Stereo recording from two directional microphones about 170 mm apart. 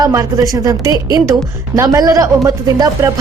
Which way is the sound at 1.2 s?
20° right (ahead or behind).